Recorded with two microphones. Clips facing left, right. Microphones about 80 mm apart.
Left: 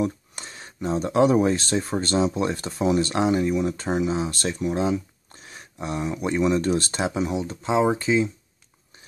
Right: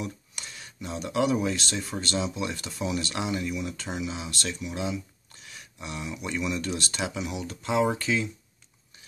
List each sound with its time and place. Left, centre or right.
0.0 s speech: left